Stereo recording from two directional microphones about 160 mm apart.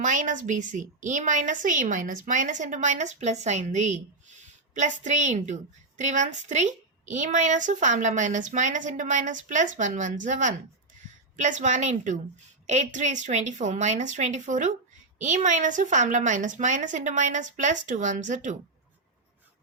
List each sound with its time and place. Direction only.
0.0 s a woman's voice: 50° right (ahead or behind)